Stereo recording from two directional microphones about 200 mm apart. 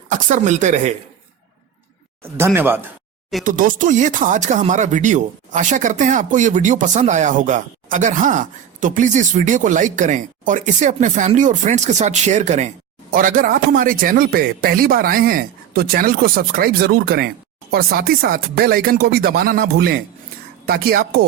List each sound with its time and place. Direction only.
0.1 s a woman's voice: 40° right (ahead or behind)
2.4 s speech: 10° right (ahead or behind)
3.4 s speech: 40° right (ahead or behind)